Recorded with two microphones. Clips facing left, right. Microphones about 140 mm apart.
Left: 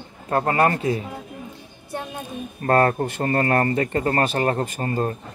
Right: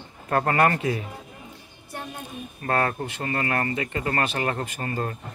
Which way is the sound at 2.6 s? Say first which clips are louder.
Left 7 dB; 40° left (ahead or behind).